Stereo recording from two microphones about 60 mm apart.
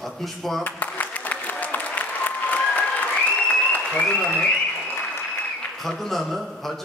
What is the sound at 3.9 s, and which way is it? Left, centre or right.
Speech, centre.